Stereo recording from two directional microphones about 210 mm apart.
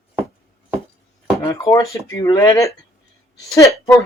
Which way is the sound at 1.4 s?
15° left (ahead or behind).